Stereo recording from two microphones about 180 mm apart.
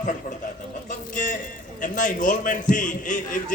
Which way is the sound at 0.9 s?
45° left (ahead or behind).